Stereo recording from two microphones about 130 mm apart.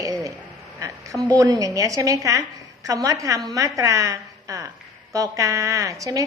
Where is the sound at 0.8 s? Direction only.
25° right (ahead or behind).